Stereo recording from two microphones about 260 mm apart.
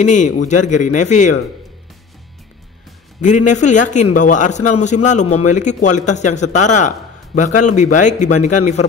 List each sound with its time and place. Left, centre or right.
0.0 s a man's voice: left
3.2 s a man's voice: left